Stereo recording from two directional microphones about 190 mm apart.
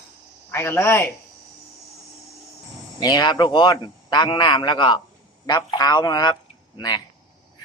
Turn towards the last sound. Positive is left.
turn(degrees=25)  # may be behind; listen again after turning